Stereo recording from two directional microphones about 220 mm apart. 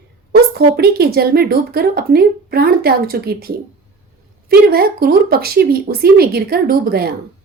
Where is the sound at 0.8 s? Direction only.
45° right (ahead or behind).